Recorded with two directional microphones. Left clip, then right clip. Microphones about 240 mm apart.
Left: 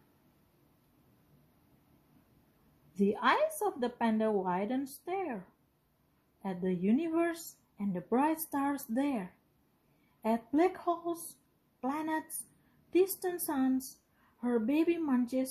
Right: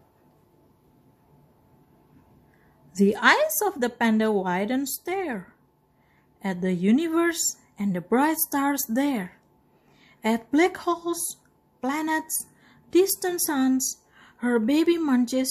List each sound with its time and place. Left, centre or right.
2.9 s a woman's voice: centre
6.4 s a woman's voice: centre